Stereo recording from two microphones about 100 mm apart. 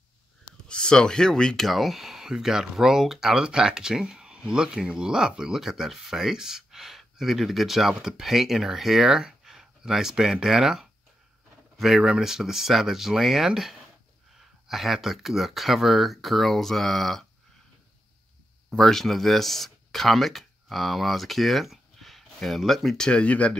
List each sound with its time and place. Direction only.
0.7 s speech: 10° left (ahead or behind)
18.7 s speech: 5° left (ahead or behind)